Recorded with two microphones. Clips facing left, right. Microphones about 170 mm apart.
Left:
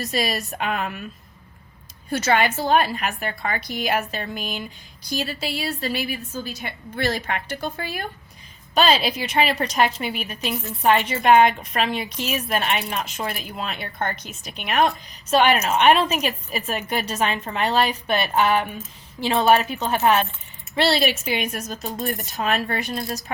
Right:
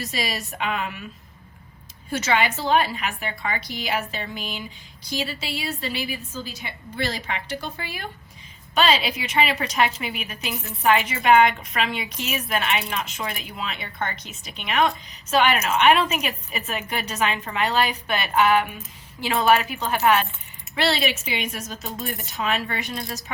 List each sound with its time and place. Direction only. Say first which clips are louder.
0.1 s a woman's voice: left 4 dB; 50° left (ahead or behind)
2.2 s a woman's voice: left 2 dB; 45° left (ahead or behind)
8.7 s a woman's voice: left 2 dB; 40° left (ahead or behind)
15.3 s a woman's voice: left 2 dB; 30° left (ahead or behind)
21.2 s a woman's voice: left 4 dB; 50° left (ahead or behind)